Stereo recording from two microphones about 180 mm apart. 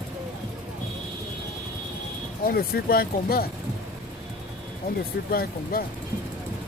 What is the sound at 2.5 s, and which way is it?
Speech, 55° left (ahead or behind).